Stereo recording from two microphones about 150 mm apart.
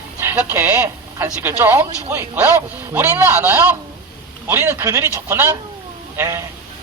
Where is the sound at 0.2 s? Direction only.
15° right (ahead or behind).